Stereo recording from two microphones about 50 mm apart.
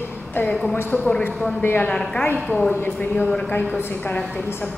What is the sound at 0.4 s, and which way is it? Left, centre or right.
Speech, left.